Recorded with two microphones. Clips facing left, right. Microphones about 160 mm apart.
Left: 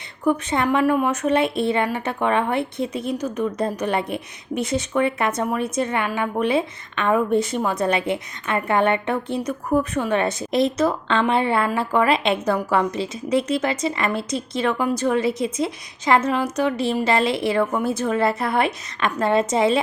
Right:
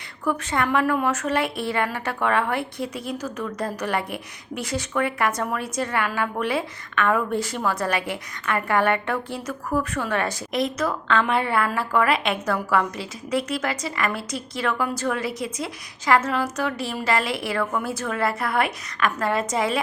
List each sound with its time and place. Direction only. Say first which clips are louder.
0.3 s a woman's voice: left 4 dB; 20° left (ahead or behind)